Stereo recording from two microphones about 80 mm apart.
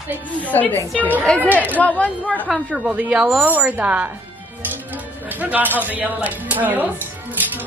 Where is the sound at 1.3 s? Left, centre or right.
Centre.